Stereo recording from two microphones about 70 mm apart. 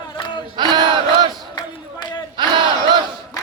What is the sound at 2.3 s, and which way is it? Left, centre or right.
Battle cry, right.